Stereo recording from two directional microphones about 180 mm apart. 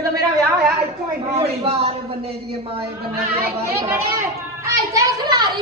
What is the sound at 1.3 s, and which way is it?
A man's voice, 35° right (ahead or behind).